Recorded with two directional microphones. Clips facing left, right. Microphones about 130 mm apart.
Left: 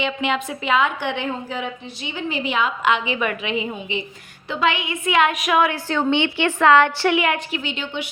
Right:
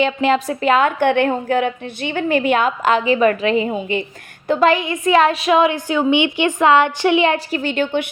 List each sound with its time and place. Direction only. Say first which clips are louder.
0.0 s a woman's voice: right 7 dB; 40° right (ahead or behind)
4.4 s a woman's voice: right 7 dB; 40° right (ahead or behind)